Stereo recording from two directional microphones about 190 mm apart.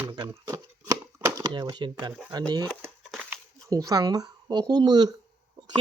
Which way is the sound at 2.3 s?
20° right (ahead or behind).